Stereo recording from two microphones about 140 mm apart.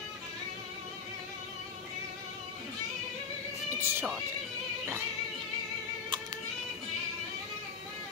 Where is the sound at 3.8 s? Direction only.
15° right (ahead or behind).